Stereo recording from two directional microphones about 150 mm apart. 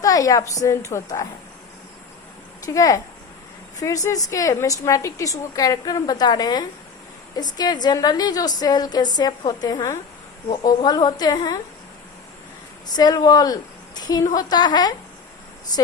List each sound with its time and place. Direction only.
0.0 s a woman's voice: 25° left (ahead or behind)
2.6 s a woman's voice: 20° left (ahead or behind)
13.0 s a woman's voice: 25° left (ahead or behind)